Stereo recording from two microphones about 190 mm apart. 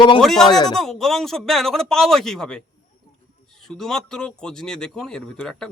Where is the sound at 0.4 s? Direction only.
20° left (ahead or behind).